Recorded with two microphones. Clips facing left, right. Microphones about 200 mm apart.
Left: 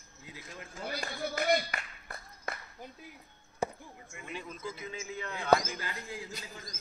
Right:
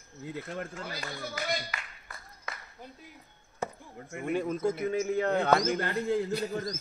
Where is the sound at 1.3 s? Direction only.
55° left (ahead or behind).